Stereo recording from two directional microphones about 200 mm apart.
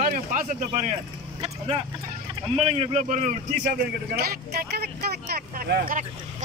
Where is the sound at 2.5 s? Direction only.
30° right (ahead or behind).